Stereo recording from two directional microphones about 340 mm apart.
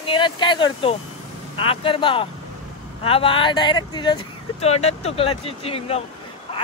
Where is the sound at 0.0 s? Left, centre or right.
Centre.